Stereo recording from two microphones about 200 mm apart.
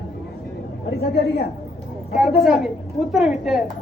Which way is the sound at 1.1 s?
55° left (ahead or behind).